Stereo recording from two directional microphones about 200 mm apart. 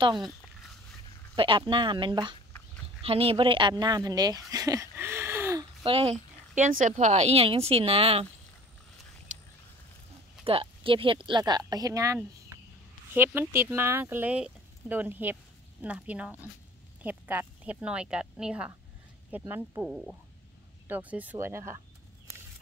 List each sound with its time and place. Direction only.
1.3 s speech: 25° right (ahead or behind)
5.9 s a woman's voice: 30° right (ahead or behind)
10.4 s speech: 25° right (ahead or behind)
19.8 s speech: centre (ahead or behind)